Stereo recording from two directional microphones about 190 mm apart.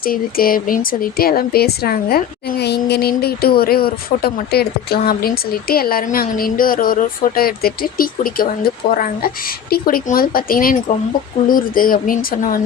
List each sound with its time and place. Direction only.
0.0 s a woman's voice: 50° left (ahead or behind)